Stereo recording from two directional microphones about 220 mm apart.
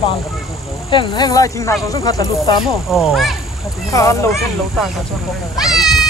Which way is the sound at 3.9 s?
15° left (ahead or behind).